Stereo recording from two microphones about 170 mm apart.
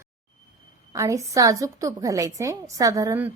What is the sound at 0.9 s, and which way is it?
A woman's voice, 20° right (ahead or behind).